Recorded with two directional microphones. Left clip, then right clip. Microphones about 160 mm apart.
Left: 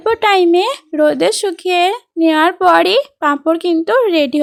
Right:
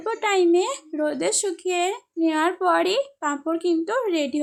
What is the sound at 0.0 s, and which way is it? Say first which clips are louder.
Speech: left 10 dB; 60° left (ahead or behind).